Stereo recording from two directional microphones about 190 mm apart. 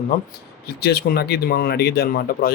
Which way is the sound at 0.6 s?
55° left (ahead or behind).